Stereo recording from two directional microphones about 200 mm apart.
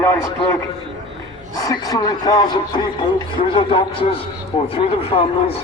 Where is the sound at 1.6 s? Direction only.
20° left (ahead or behind).